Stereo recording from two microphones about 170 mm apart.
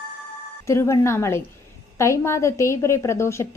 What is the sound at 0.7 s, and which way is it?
A woman's voice, 15° left (ahead or behind).